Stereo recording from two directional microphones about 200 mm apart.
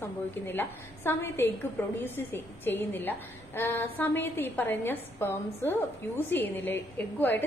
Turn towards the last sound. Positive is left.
turn(degrees=10)  # may be behind; listen again after turning